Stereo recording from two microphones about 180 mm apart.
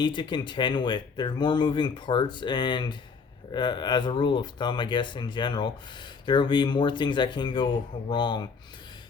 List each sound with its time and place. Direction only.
0.0 s speech: 25° left (ahead or behind)